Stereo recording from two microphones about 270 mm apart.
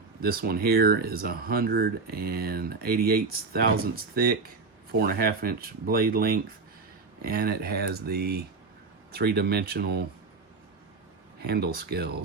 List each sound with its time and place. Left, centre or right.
0.2 s speech: right
11.3 s speech: right